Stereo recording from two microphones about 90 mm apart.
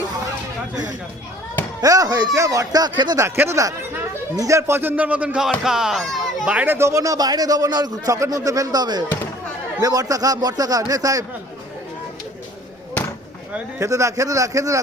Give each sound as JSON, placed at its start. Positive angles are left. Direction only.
{"t": 1.8, "sound": "speech", "side_deg": -40}
{"t": 3.2, "sound": "speech", "side_deg": -25}
{"t": 6.7, "sound": "a man's voice", "side_deg": -35}
{"t": 13.7, "sound": "speech", "side_deg": -35}